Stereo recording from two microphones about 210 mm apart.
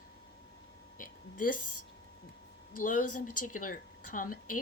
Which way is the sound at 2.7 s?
40° left (ahead or behind).